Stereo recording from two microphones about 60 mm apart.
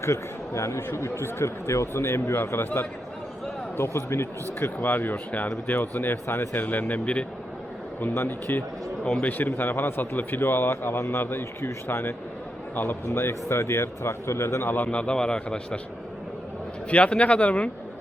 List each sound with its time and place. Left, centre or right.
0.0 s speech: left
2.3 s speech: left
6.2 s speech: left
6.5 s speech: left
8.1 s speech: left
9.2 s speech: left
14.8 s a man's voice: centre
16.9 s speech: left